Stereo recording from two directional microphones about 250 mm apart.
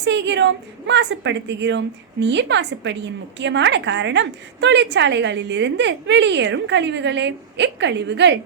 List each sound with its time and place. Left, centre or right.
0.0 s a woman's voice: right